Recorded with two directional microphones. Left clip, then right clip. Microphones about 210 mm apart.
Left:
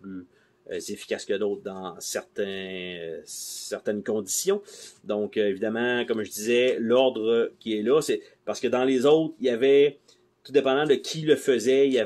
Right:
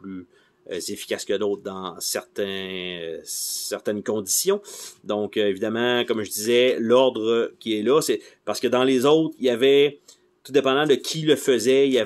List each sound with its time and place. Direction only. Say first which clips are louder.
0.7 s speech: right 3 dB; 25° right (ahead or behind)